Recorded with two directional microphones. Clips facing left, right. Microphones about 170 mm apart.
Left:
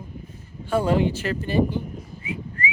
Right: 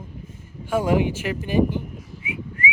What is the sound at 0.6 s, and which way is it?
Speech, 10° right (ahead or behind).